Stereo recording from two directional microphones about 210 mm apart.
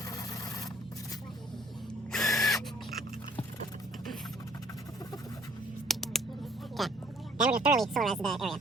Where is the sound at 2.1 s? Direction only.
Centre (ahead or behind).